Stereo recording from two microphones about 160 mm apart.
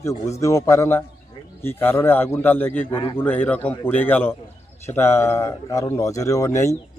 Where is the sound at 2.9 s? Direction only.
30° left (ahead or behind).